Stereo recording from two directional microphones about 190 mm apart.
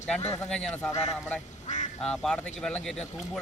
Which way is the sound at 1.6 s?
40° left (ahead or behind).